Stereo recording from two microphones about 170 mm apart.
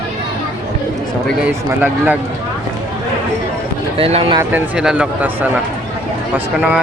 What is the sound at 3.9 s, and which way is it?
Speech, 35° right (ahead or behind).